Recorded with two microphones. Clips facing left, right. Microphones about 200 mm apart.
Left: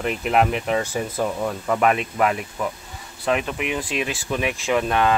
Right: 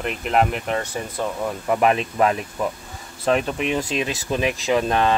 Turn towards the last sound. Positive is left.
turn(degrees=-25)  # may be behind; listen again after turning